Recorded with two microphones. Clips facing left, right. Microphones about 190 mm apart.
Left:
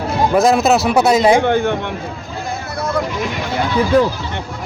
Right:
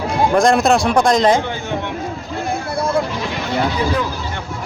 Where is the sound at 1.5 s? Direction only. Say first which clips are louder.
Left 11 dB; 60° left (ahead or behind).